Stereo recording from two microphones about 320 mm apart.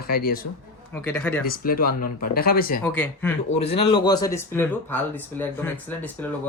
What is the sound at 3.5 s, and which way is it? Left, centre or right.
Speech, centre.